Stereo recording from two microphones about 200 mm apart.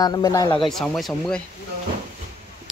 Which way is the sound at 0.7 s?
Centre (ahead or behind).